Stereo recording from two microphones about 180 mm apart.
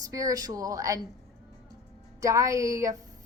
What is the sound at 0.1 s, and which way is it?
Speech, 20° right (ahead or behind).